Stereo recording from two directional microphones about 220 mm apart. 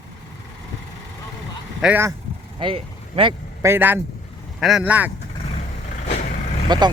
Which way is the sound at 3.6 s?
10° right (ahead or behind).